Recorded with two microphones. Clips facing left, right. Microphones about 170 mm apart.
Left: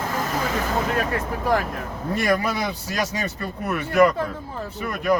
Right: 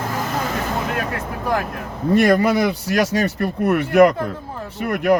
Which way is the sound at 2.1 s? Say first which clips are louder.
Right 8 dB; 70° right (ahead or behind).